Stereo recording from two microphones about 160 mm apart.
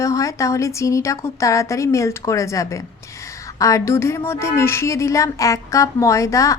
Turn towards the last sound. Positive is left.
turn(degrees=20)  # may be behind; listen again after turning